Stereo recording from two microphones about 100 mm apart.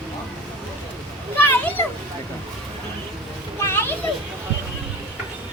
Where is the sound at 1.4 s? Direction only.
20° left (ahead or behind).